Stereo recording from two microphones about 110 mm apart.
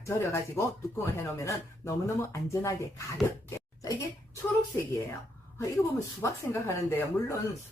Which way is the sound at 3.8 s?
30° left (ahead or behind).